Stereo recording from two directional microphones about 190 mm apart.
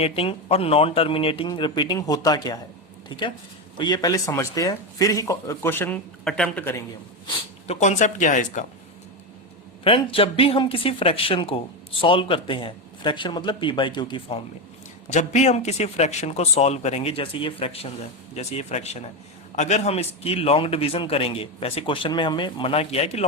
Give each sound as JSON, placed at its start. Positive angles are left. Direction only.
{"t": 0.0, "sound": "speech", "side_deg": 30}
{"t": 7.7, "sound": "a man's voice", "side_deg": 40}
{"t": 9.8, "sound": "speech", "side_deg": 30}
{"t": 15.1, "sound": "a man's voice", "side_deg": 40}